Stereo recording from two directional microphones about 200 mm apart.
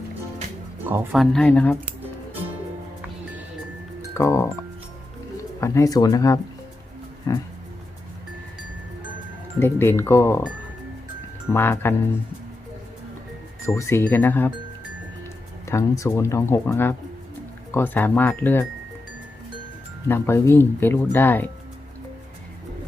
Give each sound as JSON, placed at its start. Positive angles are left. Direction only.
{"t": 0.9, "sound": "speech", "side_deg": -5}
{"t": 4.1, "sound": "speech", "side_deg": 15}
{"t": 5.5, "sound": "speech", "side_deg": 15}
{"t": 9.6, "sound": "speech", "side_deg": 10}
{"t": 11.5, "sound": "speech", "side_deg": 10}
{"t": 13.7, "sound": "speech", "side_deg": 15}
{"t": 15.6, "sound": "speech", "side_deg": 15}
{"t": 20.1, "sound": "speech", "side_deg": 10}